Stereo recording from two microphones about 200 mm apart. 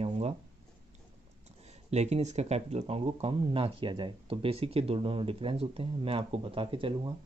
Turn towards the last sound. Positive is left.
turn(degrees=-25)  # may be behind; listen again after turning